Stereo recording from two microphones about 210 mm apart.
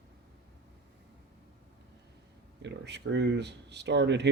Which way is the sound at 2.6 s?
55° right (ahead or behind).